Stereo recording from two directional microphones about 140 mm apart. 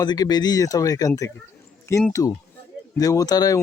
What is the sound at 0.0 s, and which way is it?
Speech, 30° left (ahead or behind).